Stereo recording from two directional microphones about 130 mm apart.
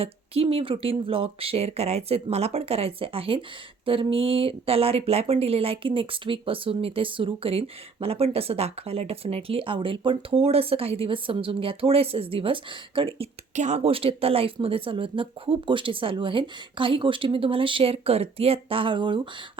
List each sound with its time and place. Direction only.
0.0 s speech: 45° right (ahead or behind)
13.6 s speech: 60° right (ahead or behind); by 19.3 s 40° right (ahead or behind)